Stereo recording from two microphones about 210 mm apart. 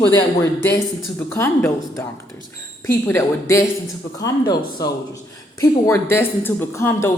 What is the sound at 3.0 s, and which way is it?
Speech, 10° left (ahead or behind).